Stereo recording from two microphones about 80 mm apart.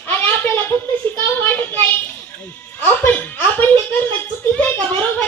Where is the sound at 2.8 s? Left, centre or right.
Left.